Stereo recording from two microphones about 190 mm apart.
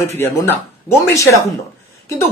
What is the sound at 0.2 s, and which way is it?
Speech, 10° left (ahead or behind).